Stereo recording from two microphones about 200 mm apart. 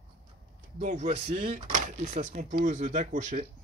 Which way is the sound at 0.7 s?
35° right (ahead or behind).